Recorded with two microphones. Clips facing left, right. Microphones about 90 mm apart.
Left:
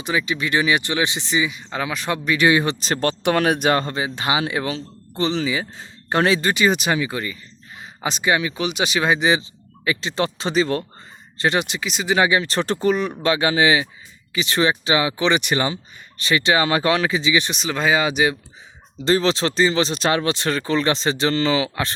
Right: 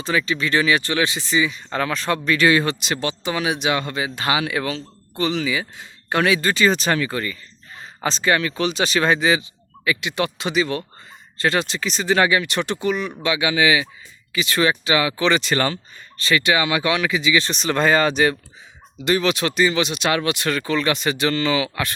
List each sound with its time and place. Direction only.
0.0 s speech: 15° left (ahead or behind)
2.8 s speech: 45° left (ahead or behind)
3.9 s speech: 25° left (ahead or behind)
6.5 s speech: 15° left (ahead or behind)
9.8 s speech: 30° left (ahead or behind)
11.3 s speech: 20° left (ahead or behind)
12.4 s speech: 35° left (ahead or behind)
17.5 s speech: 5° left (ahead or behind)
19.0 s speech: 30° left (ahead or behind)